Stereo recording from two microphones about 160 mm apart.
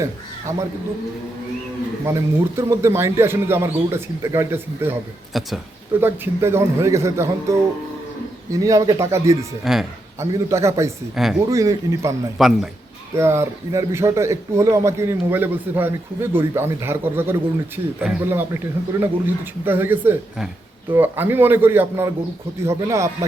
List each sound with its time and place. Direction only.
0.0 s a man's voice: 20° right (ahead or behind)
2.0 s speech: 20° right (ahead or behind)
5.3 s speech: centre (ahead or behind)
6.0 s speech: 15° right (ahead or behind)
11.1 s speech: 5° right (ahead or behind)
11.4 s speech: 20° right (ahead or behind)
12.4 s speech: centre (ahead or behind)
13.1 s speech: 15° right (ahead or behind)